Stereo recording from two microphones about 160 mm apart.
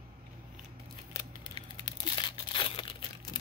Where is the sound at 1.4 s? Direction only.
25° left (ahead or behind).